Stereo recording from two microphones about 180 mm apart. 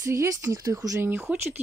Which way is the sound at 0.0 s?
15° right (ahead or behind).